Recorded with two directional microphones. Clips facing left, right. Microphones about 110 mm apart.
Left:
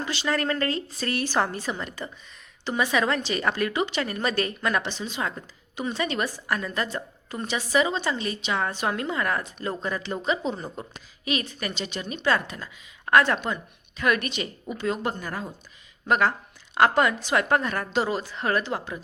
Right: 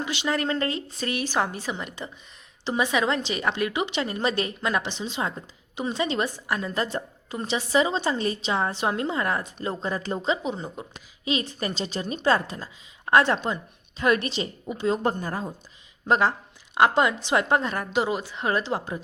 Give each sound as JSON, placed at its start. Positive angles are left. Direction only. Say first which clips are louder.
{"t": 0.0, "sound": "a woman's voice", "louder": "even", "side_deg": -20}
{"t": 10.4, "sound": "a woman's voice", "louder": "even", "side_deg": -15}
{"t": 11.3, "sound": "a woman's voice", "louder": "right 2 dB", "side_deg": -25}